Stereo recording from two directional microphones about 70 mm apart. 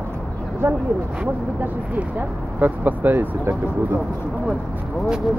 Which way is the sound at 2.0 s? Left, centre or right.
Right.